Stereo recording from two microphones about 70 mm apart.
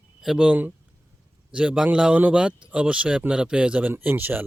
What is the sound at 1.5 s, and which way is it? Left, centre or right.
Speech, centre.